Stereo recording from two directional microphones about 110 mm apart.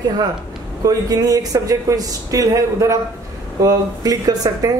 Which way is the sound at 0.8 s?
35° right (ahead or behind).